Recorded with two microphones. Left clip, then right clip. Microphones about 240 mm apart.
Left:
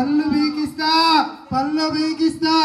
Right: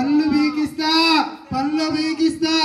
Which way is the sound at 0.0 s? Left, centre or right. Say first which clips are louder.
Right 1 dB; left.